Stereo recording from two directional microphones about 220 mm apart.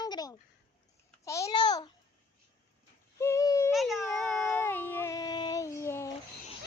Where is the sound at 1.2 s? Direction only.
15° left (ahead or behind).